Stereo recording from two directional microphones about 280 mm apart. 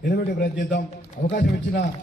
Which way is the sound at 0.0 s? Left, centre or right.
Left.